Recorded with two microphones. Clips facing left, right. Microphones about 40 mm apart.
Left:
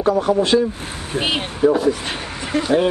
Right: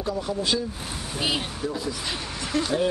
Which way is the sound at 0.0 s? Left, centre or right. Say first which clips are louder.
Left 11 dB; left.